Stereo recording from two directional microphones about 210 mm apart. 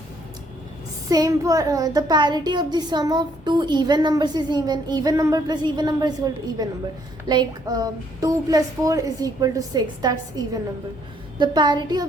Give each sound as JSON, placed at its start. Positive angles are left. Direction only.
{"t": 1.1, "sound": "a child's voice", "side_deg": -15}